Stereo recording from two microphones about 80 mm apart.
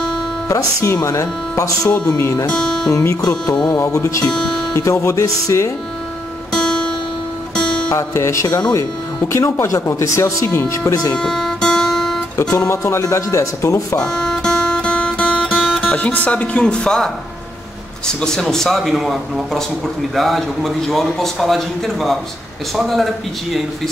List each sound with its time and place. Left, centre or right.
0.5 s speech: left
1.9 s speech: left
2.9 s speech: left
3.2 s music: left
3.6 s speech: left
4.3 s speech: centre
4.7 s speech: left
6.5 s guitar: centre
7.9 s speech: left
10.9 s speech: left
11.1 s music: centre
12.5 s speech: left
13.9 s music: centre
15.8 s speech: centre